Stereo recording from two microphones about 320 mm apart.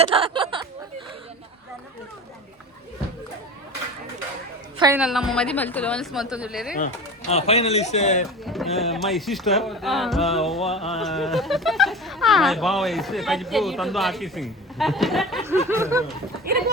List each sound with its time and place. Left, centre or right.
0.0 s a sound: centre
4.8 s speech: centre
6.7 s speech: left
8.4 s speech: centre